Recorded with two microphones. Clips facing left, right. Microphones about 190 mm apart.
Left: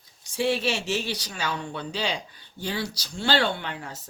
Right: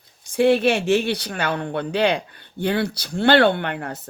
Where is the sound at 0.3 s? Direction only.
55° right (ahead or behind).